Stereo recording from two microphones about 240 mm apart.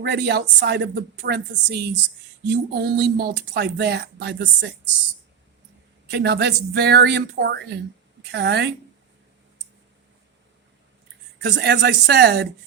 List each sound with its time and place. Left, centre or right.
0.0 s speech: right
6.1 s speech: right
11.3 s speech: right